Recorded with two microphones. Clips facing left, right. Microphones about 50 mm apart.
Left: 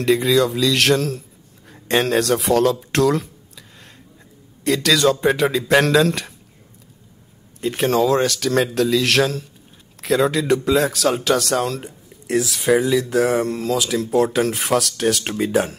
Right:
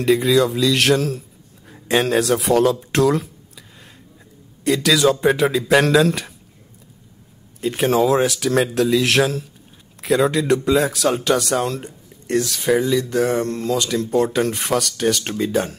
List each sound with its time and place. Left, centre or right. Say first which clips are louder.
0.0 s speech: right 1 dB; centre
4.6 s speech: right 1 dB; centre
7.6 s speech: right 1 dB; centre